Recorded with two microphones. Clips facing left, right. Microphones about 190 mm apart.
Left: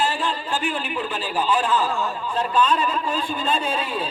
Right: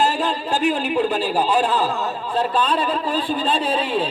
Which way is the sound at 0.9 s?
40° right (ahead or behind).